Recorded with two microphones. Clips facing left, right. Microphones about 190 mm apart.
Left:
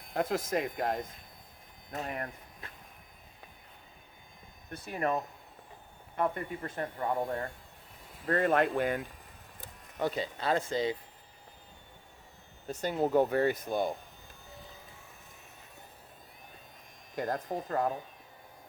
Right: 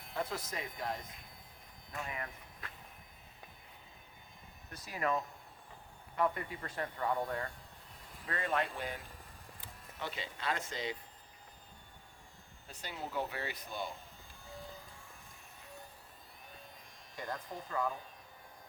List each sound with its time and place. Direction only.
0.1 s speech: 50° left (ahead or behind)
4.7 s speech: 55° left (ahead or behind)
6.6 s speech: 25° left (ahead or behind)
8.3 s speech: 50° left (ahead or behind)
9.6 s speech: 45° left (ahead or behind)
12.6 s speech: 45° left (ahead or behind)
17.2 s speech: 45° left (ahead or behind)